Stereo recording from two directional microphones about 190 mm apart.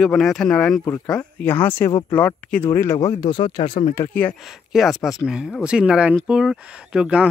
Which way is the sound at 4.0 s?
10° left (ahead or behind).